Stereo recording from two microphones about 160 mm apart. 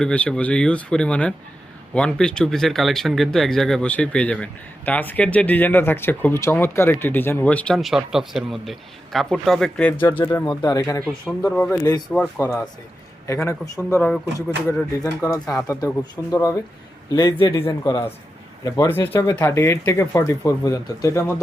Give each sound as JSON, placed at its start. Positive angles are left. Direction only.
{"t": 0.0, "sound": "speech", "side_deg": 5}
{"t": 11.0, "sound": "speech", "side_deg": 5}
{"t": 11.8, "sound": "speech", "side_deg": 25}
{"t": 12.1, "sound": "speech", "side_deg": 10}